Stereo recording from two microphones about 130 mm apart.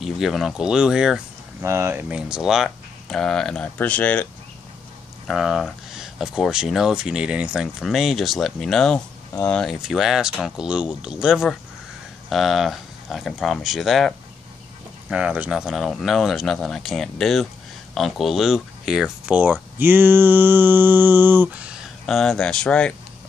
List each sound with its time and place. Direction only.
0.0 s speech: centre (ahead or behind)
1.6 s speech: 20° right (ahead or behind); by 4.3 s 10° left (ahead or behind)
5.3 s speech: 5° right (ahead or behind)
22.0 s speech: 5° left (ahead or behind)